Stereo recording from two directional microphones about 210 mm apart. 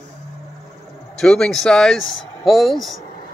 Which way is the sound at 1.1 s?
Centre (ahead or behind).